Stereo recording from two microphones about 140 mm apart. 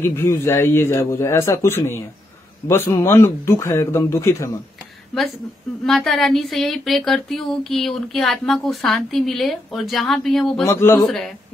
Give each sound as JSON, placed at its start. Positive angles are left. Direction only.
{"t": 0.0, "sound": "a man's voice", "side_deg": 20}
{"t": 5.9, "sound": "a woman's voice", "side_deg": 0}
{"t": 10.6, "sound": "a man's voice", "side_deg": 20}
{"t": 11.1, "sound": "a woman's voice", "side_deg": 0}